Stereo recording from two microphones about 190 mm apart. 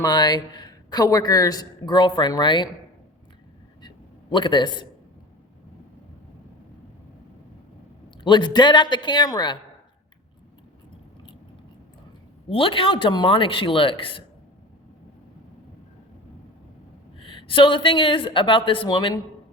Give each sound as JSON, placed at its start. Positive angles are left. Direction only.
{"t": 0.0, "sound": "speech", "side_deg": 20}
{"t": 3.8, "sound": "a sound", "side_deg": 25}
{"t": 8.2, "sound": "speech", "side_deg": 25}
{"t": 12.5, "sound": "speech", "side_deg": 30}
{"t": 17.2, "sound": "speech", "side_deg": 25}